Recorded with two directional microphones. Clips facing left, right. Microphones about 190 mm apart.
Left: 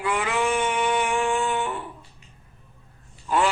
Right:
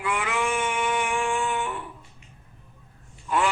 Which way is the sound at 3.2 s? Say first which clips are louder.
Left 2 dB; 30° left (ahead or behind).